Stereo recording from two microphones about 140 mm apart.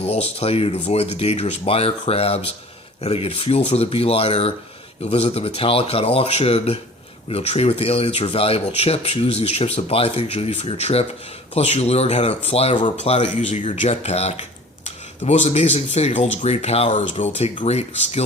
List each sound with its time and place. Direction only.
0.0 s speech: 50° left (ahead or behind)
13.0 s speech: 55° left (ahead or behind)